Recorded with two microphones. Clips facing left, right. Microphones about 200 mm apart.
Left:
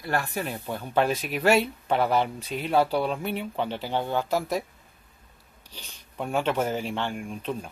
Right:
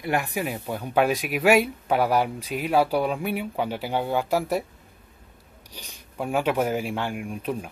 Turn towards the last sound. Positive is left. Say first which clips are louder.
# right 2 dB
turn(degrees=-10)  # may be behind; listen again after turning